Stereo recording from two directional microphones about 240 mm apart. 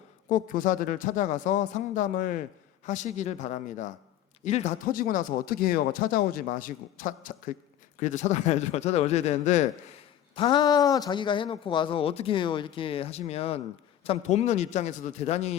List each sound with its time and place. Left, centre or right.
0.3 s speech: left